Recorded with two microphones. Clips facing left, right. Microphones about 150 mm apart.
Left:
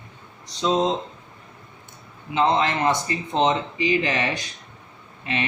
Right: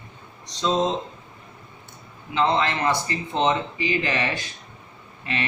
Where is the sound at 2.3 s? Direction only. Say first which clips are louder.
Left 1 dB; 20° left (ahead or behind).